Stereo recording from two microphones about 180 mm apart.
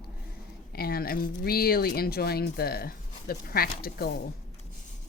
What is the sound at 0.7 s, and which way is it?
Speech, 55° left (ahead or behind).